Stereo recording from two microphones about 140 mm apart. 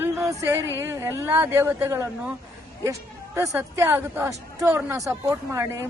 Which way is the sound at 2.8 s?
20° right (ahead or behind).